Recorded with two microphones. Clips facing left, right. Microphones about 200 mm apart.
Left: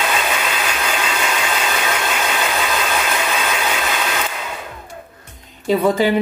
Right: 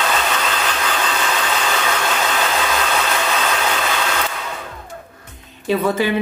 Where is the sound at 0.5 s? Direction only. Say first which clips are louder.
Even; 10° left (ahead or behind).